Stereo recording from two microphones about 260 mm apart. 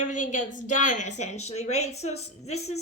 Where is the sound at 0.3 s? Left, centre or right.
Left.